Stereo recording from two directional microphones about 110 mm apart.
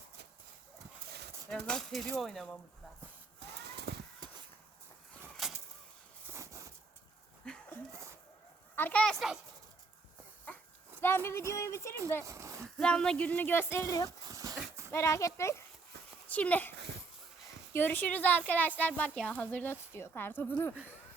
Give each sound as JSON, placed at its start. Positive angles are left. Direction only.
{"t": 1.6, "sound": "speech", "side_deg": 5}
{"t": 4.2, "sound": "a sound", "side_deg": -40}
{"t": 5.4, "sound": "vehicle", "side_deg": 0}
{"t": 6.2, "sound": "a sound", "side_deg": -25}
{"t": 7.4, "sound": "a sound", "side_deg": 10}
{"t": 8.7, "sound": "a sound", "side_deg": 15}
{"t": 11.0, "sound": "speech", "side_deg": 20}
{"t": 12.2, "sound": "speech", "side_deg": -25}
{"t": 12.7, "sound": "speech", "side_deg": 10}
{"t": 14.3, "sound": "dog", "side_deg": -35}
{"t": 14.9, "sound": "a child's voice", "side_deg": 30}
{"t": 16.3, "sound": "speech", "side_deg": 15}
{"t": 17.7, "sound": "speech", "side_deg": 15}